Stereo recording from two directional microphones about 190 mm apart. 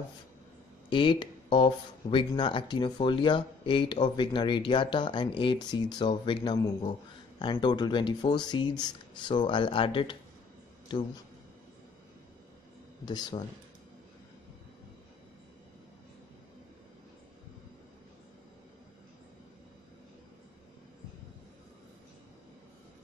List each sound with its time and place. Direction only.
0.8 s speech: 25° left (ahead or behind)
7.6 s speech: 25° left (ahead or behind)
13.0 s speech: 20° left (ahead or behind)